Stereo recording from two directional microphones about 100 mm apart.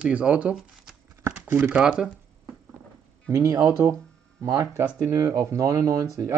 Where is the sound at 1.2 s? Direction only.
20° right (ahead or behind).